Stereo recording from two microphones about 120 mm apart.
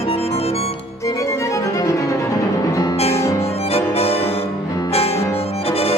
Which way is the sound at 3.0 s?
60° left (ahead or behind).